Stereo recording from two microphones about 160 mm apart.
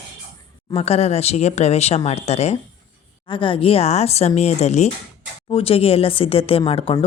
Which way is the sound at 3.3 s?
35° left (ahead or behind).